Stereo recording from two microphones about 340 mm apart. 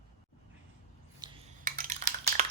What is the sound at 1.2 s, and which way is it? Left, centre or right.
Cutlery, centre.